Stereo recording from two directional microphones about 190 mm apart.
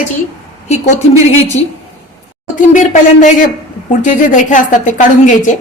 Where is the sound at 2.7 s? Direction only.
40° left (ahead or behind).